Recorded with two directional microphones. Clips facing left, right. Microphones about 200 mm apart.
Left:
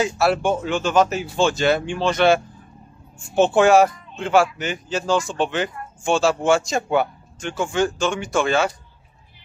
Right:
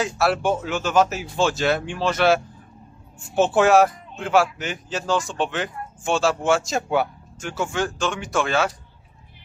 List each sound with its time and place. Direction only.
0.0 s speech: centre (ahead or behind)